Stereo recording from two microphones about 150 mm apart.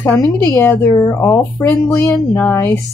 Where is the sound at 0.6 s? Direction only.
15° left (ahead or behind).